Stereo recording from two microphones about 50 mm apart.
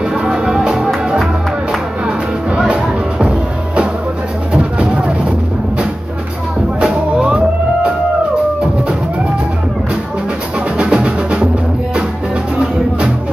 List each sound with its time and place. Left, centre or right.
0.2 s music: centre
2.0 s music: right
6.8 s music: centre
10.8 s music: right